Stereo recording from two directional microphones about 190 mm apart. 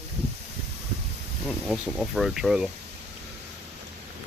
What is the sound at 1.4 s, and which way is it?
Speech, centre (ahead or behind).